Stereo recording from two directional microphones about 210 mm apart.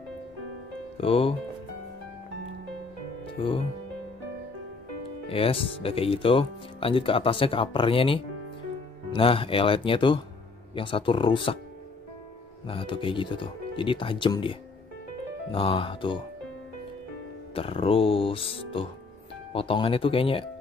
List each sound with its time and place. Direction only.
0.9 s speech: 25° left (ahead or behind)
3.3 s speech: 25° left (ahead or behind)
5.3 s speech: 25° left (ahead or behind)
12.6 s speech: 25° left (ahead or behind)
17.6 s speech: 25° left (ahead or behind)